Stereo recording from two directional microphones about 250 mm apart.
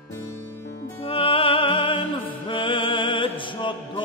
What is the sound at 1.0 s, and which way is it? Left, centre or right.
Music, left.